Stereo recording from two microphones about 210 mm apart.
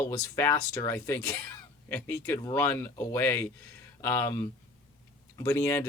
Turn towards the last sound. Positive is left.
turn(degrees=10)  # may be behind; listen again after turning